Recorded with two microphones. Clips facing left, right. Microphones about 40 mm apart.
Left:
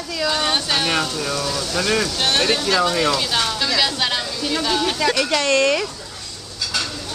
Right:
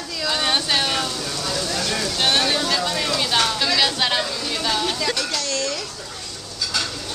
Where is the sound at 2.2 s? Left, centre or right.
Centre.